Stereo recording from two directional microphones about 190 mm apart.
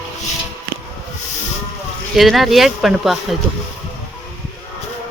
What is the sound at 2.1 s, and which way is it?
Speech, centre (ahead or behind).